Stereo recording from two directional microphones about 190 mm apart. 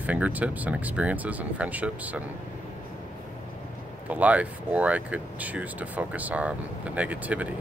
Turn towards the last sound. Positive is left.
turn(degrees=-5)  # may be behind; listen again after turning